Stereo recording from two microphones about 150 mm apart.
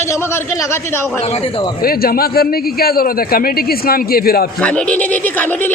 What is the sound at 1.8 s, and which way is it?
A man's voice, 80° left.